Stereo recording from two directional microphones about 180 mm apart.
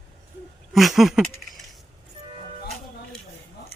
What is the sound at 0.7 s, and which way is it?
Speech, centre (ahead or behind).